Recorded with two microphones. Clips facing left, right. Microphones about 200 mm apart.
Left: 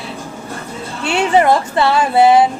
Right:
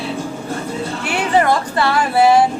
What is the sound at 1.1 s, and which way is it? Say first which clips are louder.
Speech: left 4 dB; 25° left (ahead or behind).